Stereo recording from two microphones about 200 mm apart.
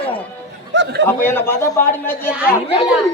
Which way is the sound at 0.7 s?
60° right (ahead or behind).